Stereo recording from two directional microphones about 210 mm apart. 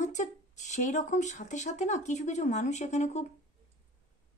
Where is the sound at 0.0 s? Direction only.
35° left (ahead or behind).